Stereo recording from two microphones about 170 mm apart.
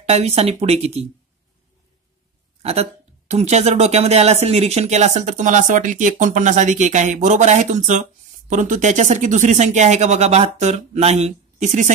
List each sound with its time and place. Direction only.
0.1 s speech: 40° right (ahead or behind)
2.6 s speech: 35° right (ahead or behind)